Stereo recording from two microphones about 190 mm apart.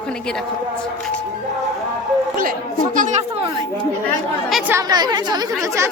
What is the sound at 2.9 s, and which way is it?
Speech, 40° right (ahead or behind).